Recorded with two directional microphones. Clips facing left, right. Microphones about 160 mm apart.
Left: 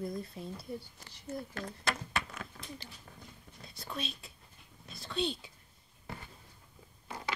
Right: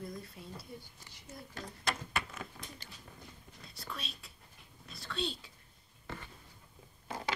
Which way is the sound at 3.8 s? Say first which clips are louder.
Left 5 dB; 20° left (ahead or behind).